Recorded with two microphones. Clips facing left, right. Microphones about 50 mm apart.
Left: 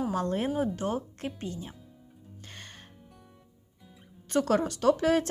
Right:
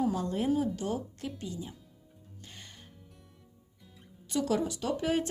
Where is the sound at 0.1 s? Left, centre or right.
Left.